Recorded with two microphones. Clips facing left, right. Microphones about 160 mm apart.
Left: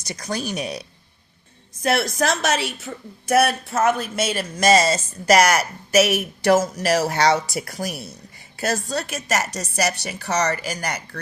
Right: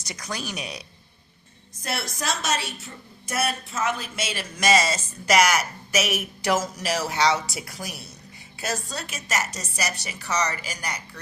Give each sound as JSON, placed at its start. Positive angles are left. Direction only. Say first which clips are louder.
{"t": 0.1, "sound": "speech", "louder": "left 6 dB", "side_deg": 35}
{"t": 1.8, "sound": "a woman's voice", "louder": "left 10 dB", "side_deg": 90}
{"t": 5.5, "sound": "a woman's voice", "louder": "left 4 dB", "side_deg": 60}
{"t": 9.0, "sound": "a woman's voice", "louder": "left 5 dB", "side_deg": 65}